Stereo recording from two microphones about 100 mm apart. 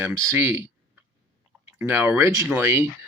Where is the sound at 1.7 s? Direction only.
20° right (ahead or behind).